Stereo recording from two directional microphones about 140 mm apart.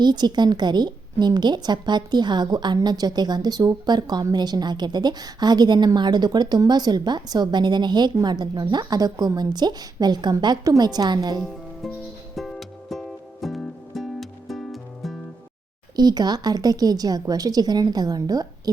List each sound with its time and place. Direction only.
0.0 s a woman's voice: 30° right (ahead or behind)
12.4 s music: centre (ahead or behind)
16.0 s a woman's voice: 30° right (ahead or behind)